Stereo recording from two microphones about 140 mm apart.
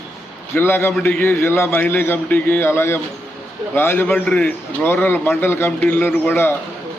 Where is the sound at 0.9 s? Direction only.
5° left (ahead or behind).